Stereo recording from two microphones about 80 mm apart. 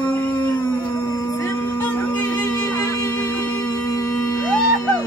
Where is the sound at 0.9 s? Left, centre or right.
Left.